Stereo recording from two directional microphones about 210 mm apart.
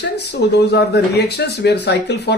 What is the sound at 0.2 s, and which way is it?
Speech, 55° left (ahead or behind).